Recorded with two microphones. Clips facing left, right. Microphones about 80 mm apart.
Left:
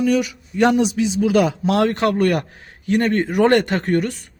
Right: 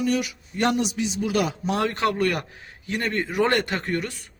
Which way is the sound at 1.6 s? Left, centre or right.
Left.